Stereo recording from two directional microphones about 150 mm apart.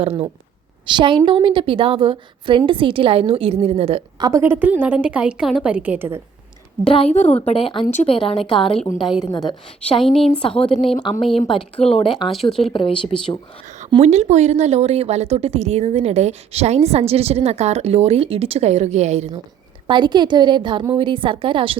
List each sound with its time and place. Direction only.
0.0 s a woman's voice: 40° right (ahead or behind)
4.2 s a woman's voice: 20° right (ahead or behind)
6.9 s a woman's voice: 45° left (ahead or behind); by 10.0 s 30° left (ahead or behind)
10.0 s a woman's voice: 5° left (ahead or behind)
10.8 s a woman's voice: 35° left (ahead or behind)
12.3 s a woman's voice: centre (ahead or behind)
12.5 s a woman's voice: 35° left (ahead or behind)
14.0 s speech: 45° right (ahead or behind)
19.9 s a woman's voice: 30° right (ahead or behind)